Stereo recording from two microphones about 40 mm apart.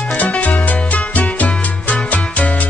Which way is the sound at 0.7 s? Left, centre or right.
Left.